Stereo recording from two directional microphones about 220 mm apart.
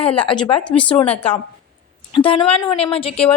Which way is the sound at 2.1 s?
25° left (ahead or behind).